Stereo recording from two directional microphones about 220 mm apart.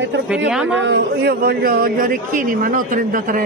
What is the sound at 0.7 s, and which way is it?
A man's voice, 50° right (ahead or behind).